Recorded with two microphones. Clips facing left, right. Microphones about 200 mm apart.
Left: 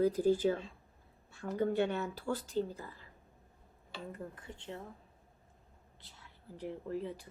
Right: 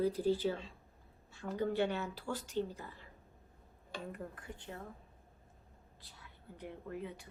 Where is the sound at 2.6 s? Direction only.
35° left (ahead or behind).